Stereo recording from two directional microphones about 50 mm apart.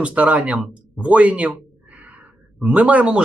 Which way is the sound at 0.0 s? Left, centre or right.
Right.